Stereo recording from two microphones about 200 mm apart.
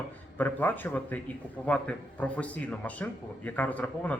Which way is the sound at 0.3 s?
10° left (ahead or behind).